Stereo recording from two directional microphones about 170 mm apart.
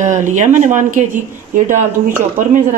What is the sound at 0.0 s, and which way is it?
Speech, 45° right (ahead or behind).